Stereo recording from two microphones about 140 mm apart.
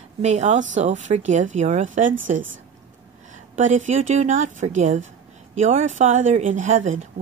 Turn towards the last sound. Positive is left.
turn(degrees=-60)  # may be behind; listen again after turning